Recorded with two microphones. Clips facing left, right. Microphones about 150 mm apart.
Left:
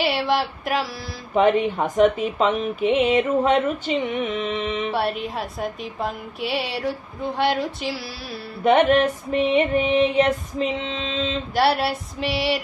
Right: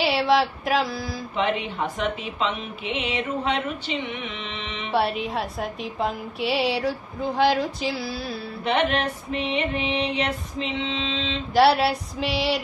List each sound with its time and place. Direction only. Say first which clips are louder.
0.0 s a woman's voice: right 1 dB; centre (ahead or behind)
1.3 s speech: left 8 dB; 45° left (ahead or behind)
4.9 s a woman's voice: right 1 dB; centre (ahead or behind)
8.6 s speech: left 7 dB; 45° left (ahead or behind)
11.5 s a woman's voice: right 3 dB; centre (ahead or behind)